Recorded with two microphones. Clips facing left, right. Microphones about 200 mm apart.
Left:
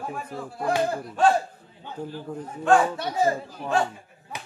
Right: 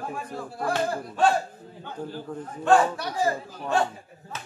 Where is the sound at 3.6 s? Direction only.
Centre (ahead or behind).